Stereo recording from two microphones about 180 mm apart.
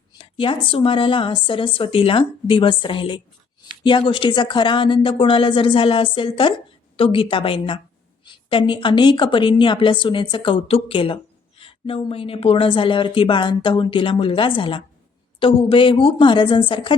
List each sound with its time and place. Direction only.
0.2 s a woman's voice: 30° left (ahead or behind)